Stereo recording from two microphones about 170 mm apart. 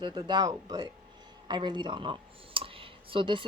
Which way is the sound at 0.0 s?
25° right (ahead or behind).